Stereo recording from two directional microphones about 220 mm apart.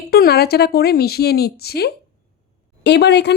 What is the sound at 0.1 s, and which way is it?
A woman's voice, 45° left (ahead or behind).